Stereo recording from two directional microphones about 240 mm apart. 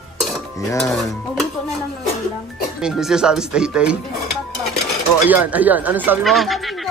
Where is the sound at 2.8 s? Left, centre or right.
Centre.